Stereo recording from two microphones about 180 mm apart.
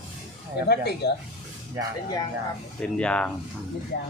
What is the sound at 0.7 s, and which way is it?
Speech, 65° left (ahead or behind).